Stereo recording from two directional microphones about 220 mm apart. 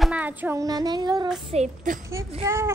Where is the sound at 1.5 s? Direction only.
35° right (ahead or behind).